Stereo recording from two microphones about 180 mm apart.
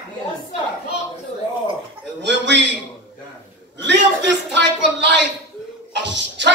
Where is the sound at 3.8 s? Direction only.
75° right (ahead or behind).